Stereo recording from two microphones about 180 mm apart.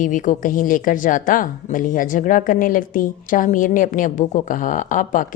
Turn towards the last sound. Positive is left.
turn(degrees=45)  # may be behind; listen again after turning